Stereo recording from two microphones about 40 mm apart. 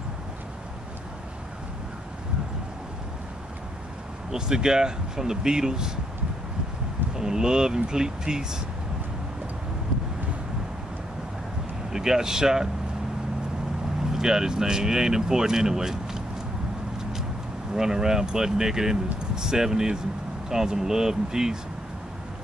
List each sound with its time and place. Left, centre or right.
4.3 s speech: centre
7.2 s speech: centre
11.9 s speech: centre
14.1 s speech: centre
17.7 s speech: centre